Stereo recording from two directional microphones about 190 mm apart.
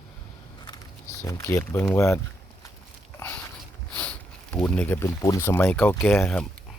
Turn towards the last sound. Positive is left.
turn(degrees=10)  # may be behind; listen again after turning